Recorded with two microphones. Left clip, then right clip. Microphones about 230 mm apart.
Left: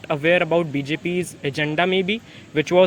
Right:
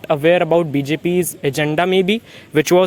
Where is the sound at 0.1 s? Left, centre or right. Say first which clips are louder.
Right 5 dB; right.